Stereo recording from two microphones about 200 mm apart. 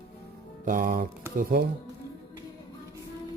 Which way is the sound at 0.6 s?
45° right (ahead or behind).